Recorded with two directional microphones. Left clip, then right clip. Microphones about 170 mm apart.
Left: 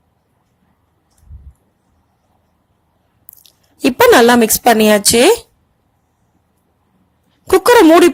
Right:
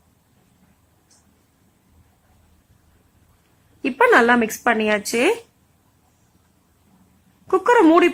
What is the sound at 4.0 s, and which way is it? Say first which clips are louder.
Speech: left 6 dB; 40° left (ahead or behind).